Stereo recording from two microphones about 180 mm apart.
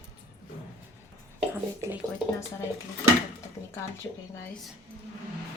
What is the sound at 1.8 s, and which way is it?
Speech, 15° right (ahead or behind).